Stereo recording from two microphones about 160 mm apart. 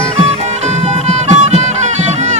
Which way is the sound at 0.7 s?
45° right (ahead or behind).